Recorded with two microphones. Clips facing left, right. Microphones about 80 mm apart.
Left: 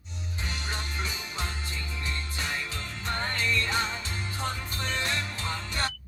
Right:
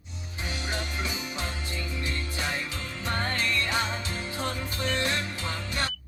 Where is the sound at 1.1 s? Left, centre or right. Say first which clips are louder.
Right 2 dB; centre.